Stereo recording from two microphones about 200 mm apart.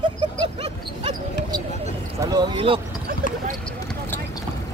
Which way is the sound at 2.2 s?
20° right (ahead or behind).